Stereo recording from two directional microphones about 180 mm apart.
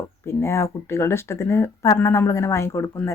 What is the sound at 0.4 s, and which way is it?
A woman's voice, 15° left (ahead or behind).